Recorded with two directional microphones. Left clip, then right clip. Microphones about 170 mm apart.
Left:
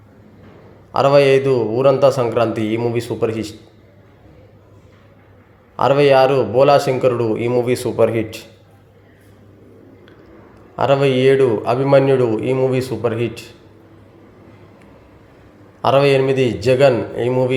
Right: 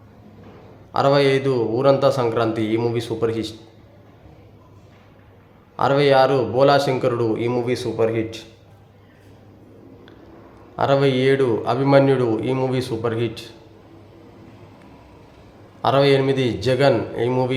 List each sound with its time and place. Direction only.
0.9 s a man's voice: 15° left (ahead or behind)
5.7 s a man's voice: 10° left (ahead or behind)
7.7 s speech: 20° left (ahead or behind)
10.8 s a man's voice: 10° left (ahead or behind)
15.8 s a man's voice: 10° left (ahead or behind)